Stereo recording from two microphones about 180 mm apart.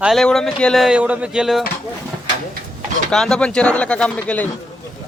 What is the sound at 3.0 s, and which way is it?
Speech, 5° left (ahead or behind).